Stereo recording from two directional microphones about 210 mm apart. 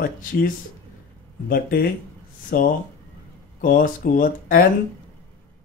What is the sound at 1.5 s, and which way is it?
Speech, 45° left (ahead or behind).